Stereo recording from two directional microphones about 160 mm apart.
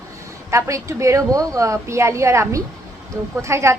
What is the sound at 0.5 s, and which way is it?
A woman's voice, 20° right (ahead or behind).